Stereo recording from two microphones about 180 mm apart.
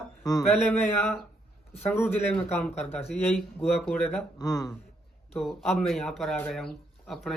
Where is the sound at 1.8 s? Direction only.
10° left (ahead or behind).